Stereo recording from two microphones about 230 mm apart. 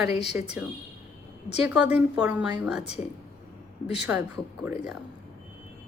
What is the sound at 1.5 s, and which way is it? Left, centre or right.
A woman's voice, centre.